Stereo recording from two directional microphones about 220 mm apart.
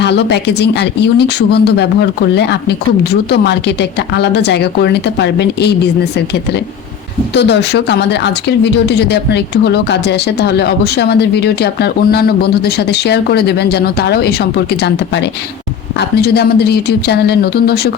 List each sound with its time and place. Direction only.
0.0 s speech: 50° left (ahead or behind)